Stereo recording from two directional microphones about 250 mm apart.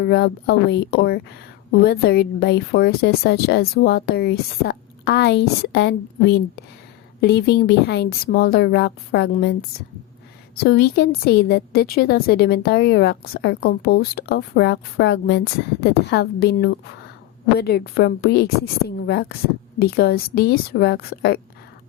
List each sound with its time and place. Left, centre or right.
0.0 s a woman's voice: left